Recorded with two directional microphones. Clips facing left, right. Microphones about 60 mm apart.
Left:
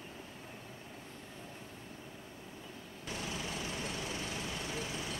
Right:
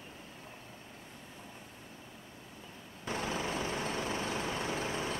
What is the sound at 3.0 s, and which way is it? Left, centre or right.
Vehicle, right.